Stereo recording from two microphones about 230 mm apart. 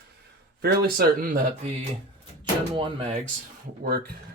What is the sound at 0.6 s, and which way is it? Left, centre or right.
Speech, right.